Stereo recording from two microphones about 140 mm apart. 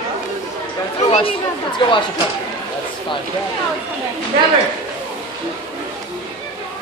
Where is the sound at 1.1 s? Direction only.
40° left (ahead or behind).